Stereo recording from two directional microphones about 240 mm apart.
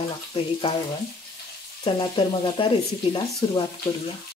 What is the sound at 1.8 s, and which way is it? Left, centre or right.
Speech, left.